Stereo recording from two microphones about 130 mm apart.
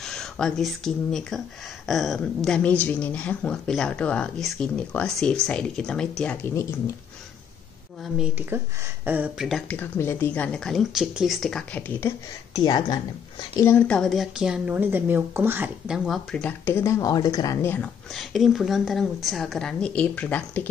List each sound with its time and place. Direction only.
0.0 s a woman's voice: 5° left (ahead or behind)
8.0 s a woman's voice: 10° right (ahead or behind)
9.7 s a woman's voice: 15° left (ahead or behind)
12.5 s a woman's voice: 35° left (ahead or behind)
13.7 s a woman's voice: 15° left (ahead or behind); by 15.7 s 15° right (ahead or behind)
15.9 s a woman's voice: 5° left (ahead or behind)
16.6 s speech: 20° left (ahead or behind)
17.6 s a woman's voice: 15° left (ahead or behind)
18.1 s a woman's voice: centre (ahead or behind)